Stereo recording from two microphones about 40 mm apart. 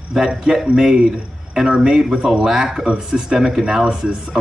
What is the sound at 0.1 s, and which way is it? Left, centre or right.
Speech, centre.